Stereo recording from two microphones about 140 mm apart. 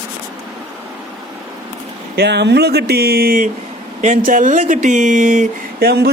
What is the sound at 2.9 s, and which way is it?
Speech, 90° right.